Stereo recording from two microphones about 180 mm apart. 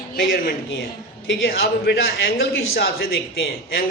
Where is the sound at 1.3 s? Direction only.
90° left; by 2.9 s 75° left (ahead or behind).